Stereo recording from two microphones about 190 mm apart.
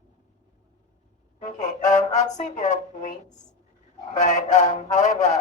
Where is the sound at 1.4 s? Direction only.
40° left (ahead or behind).